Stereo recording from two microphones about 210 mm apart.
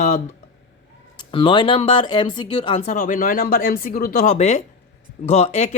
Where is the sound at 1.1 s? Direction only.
25° left (ahead or behind).